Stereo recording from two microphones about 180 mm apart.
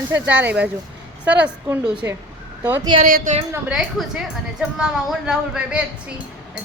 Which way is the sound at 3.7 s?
5° right (ahead or behind).